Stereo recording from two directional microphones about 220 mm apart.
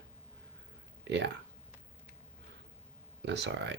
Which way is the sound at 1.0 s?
55° right (ahead or behind).